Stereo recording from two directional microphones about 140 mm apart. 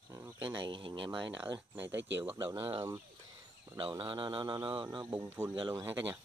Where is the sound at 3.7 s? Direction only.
40° right (ahead or behind).